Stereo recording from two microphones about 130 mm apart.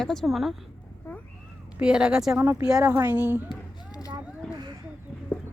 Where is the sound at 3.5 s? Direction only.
30° left (ahead or behind).